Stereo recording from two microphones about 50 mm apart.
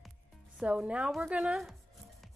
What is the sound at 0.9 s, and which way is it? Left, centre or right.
Speech, right.